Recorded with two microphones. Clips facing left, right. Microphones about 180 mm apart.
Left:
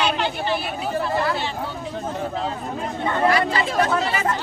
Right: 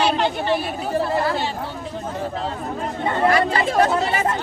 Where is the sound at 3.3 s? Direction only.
50° right (ahead or behind).